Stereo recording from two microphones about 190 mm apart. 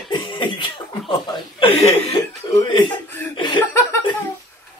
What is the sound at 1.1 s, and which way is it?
Speech, 25° left (ahead or behind).